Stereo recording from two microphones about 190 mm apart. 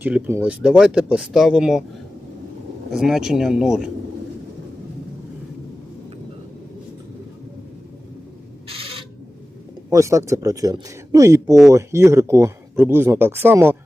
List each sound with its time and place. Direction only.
0.0 s speech: 10° right (ahead or behind)
2.9 s speech: 5° right (ahead or behind)
9.9 s speech: 15° right (ahead or behind)